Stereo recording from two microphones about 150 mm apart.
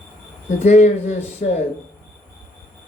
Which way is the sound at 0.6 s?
50° left (ahead or behind).